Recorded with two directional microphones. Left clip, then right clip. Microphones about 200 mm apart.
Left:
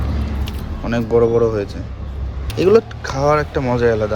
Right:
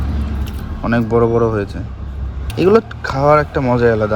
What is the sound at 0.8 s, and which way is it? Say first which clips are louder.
Speech: right 1 dB; 10° left (ahead or behind).